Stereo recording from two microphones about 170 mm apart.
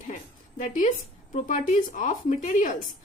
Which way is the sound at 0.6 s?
50° left (ahead or behind).